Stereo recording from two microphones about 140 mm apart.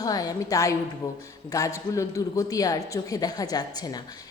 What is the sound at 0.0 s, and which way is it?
A man's voice, 25° left (ahead or behind).